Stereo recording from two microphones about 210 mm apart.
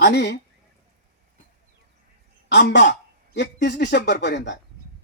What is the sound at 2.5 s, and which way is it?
Speech, 55° left (ahead or behind).